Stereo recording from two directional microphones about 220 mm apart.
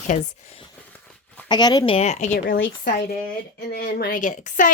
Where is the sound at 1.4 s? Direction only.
20° left (ahead or behind); by 2.6 s 35° left (ahead or behind).